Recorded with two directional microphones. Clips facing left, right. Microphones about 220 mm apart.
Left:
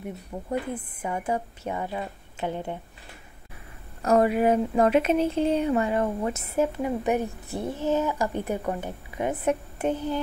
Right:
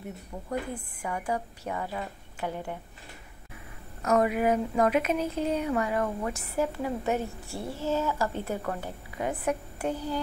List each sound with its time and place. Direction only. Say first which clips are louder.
0.5 s speech: left 3 dB; 25° left (ahead or behind)
4.0 s speech: left 4 dB; 30° left (ahead or behind)